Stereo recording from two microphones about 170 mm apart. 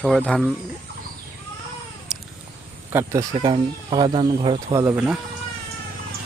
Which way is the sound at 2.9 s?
15° right (ahead or behind).